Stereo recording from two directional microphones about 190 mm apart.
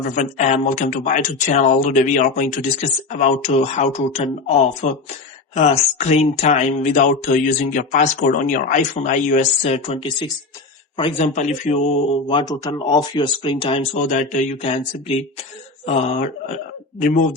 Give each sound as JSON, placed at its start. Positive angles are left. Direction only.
{"t": 0.2, "sound": "speech", "side_deg": 35}
{"t": 11.3, "sound": "speech", "side_deg": 40}
{"t": 12.3, "sound": "speech", "side_deg": 20}
{"t": 14.1, "sound": "a man's voice", "side_deg": 40}